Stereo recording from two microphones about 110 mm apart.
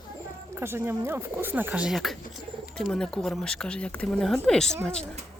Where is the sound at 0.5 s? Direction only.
20° right (ahead or behind).